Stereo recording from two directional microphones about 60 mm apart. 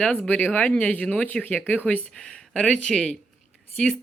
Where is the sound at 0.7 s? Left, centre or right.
Left.